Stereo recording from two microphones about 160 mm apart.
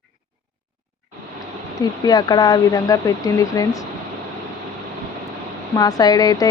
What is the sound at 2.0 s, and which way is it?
A woman's voice, 25° left (ahead or behind).